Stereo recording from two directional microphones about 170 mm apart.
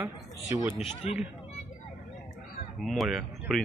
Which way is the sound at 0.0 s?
15° right (ahead or behind).